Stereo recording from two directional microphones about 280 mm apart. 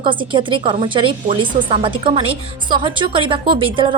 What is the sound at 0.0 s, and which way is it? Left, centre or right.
A woman's voice, centre.